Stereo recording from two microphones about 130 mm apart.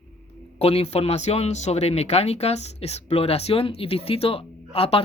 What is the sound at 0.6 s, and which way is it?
Speech, 50° left (ahead or behind).